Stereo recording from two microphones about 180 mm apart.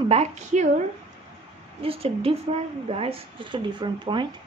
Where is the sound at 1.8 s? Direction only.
30° right (ahead or behind).